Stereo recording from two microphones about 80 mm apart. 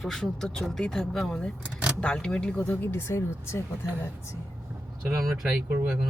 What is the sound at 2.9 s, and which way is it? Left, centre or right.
Speech, left.